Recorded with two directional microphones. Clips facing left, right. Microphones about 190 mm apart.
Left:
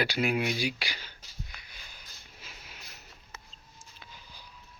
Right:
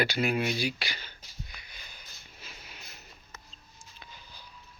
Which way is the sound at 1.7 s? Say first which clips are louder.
Right 1 dB; 5° left (ahead or behind).